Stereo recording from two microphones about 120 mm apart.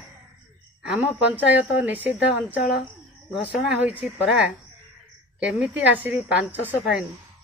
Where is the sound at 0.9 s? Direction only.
15° right (ahead or behind).